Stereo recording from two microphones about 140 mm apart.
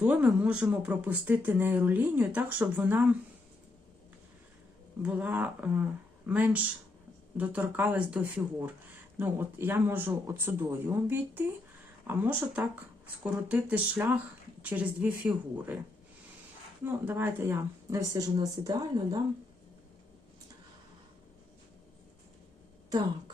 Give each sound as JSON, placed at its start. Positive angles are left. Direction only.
{"t": 0.0, "sound": "speech", "side_deg": -10}
{"t": 5.0, "sound": "speech", "side_deg": -10}
{"t": 16.8, "sound": "speech", "side_deg": -15}